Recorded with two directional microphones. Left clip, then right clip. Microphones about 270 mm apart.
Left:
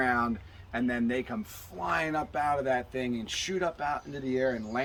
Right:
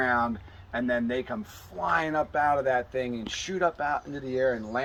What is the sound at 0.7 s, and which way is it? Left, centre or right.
Speech, centre.